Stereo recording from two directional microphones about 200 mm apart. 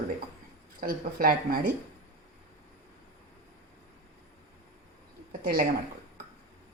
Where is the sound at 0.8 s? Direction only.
45° right (ahead or behind).